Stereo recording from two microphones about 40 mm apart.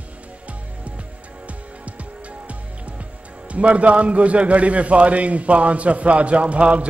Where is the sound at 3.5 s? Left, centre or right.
Right.